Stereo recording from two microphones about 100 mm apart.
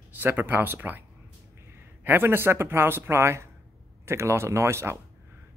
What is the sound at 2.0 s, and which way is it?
Speech, 20° right (ahead or behind).